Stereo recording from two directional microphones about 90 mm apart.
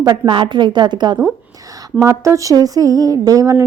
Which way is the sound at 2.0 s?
35° right (ahead or behind).